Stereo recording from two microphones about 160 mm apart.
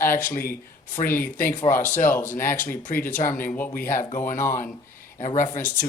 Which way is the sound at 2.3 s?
60° left (ahead or behind).